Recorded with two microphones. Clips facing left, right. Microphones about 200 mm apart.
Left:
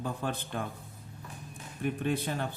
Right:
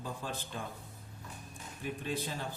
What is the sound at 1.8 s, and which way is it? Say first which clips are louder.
Speech: left 7 dB; 60° left (ahead or behind).